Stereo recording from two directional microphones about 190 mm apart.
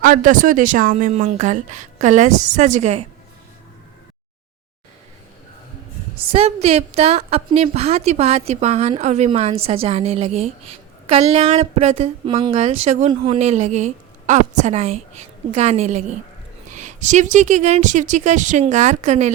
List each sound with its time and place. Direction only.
0.0 s a woman's voice: 45° right (ahead or behind)
6.3 s a woman's voice: 30° right (ahead or behind)